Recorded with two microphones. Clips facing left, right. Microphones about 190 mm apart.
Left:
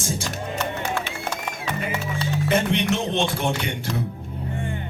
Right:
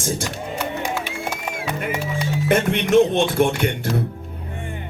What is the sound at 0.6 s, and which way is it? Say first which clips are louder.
Music: right 2 dB; 10° right (ahead or behind).